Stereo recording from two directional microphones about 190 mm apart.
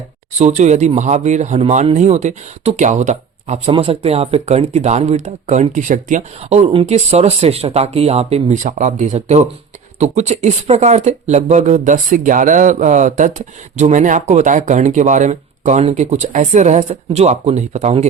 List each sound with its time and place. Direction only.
0.3 s speech: 35° right (ahead or behind)